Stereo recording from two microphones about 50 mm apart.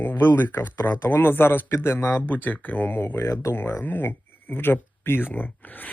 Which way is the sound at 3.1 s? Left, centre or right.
Left.